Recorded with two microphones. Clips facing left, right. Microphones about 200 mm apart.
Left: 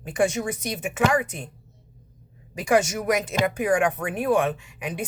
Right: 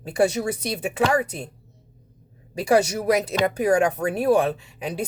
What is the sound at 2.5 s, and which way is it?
Speech, 35° right (ahead or behind).